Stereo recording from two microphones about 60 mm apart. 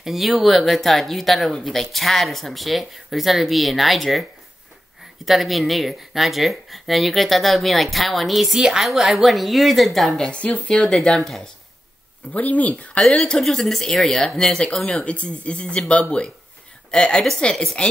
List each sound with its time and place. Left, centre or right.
0.0 s speech: centre
10.2 s speech: centre
12.3 s speech: left